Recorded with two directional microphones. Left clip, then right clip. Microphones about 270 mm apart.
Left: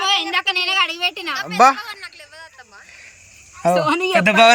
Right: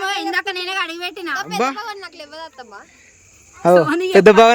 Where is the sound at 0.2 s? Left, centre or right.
Right.